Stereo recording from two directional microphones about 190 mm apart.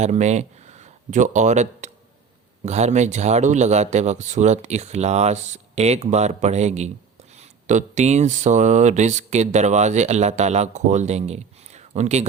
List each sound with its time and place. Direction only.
0.0 s speech: 35° right (ahead or behind)